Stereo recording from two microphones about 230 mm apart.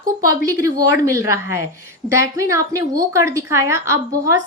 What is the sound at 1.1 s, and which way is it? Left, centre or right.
A woman's voice, centre.